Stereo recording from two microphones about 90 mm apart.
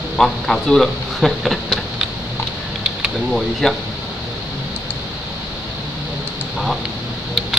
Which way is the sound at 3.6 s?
5° left (ahead or behind).